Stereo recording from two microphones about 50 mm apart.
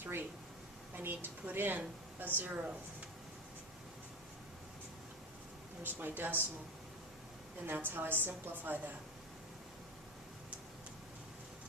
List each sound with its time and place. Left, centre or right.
0.0 s a sound: right
0.9 s a woman's voice: right
5.8 s speech: right
7.7 s a woman's voice: right